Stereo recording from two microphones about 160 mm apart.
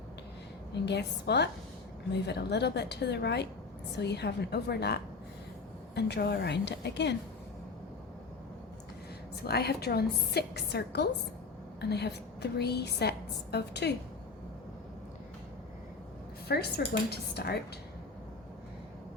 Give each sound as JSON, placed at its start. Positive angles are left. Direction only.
{"t": 0.7, "sound": "a woman's voice", "side_deg": 90}
{"t": 9.3, "sound": "a woman's voice", "side_deg": 85}
{"t": 16.5, "sound": "speech", "side_deg": 85}